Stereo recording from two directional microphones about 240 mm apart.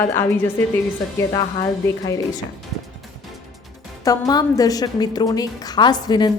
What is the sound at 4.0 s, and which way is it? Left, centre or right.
A woman's voice, centre.